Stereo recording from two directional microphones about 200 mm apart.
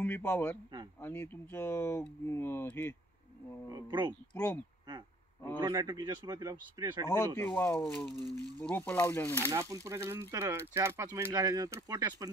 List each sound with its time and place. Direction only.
0.0 s speech: 10° left (ahead or behind)
3.7 s speech: 25° right (ahead or behind)
4.1 s speech: 10° left (ahead or behind)
5.6 s speech: 20° right (ahead or behind)
7.1 s speech: 10° left (ahead or behind)
9.4 s speech: 15° right (ahead or behind)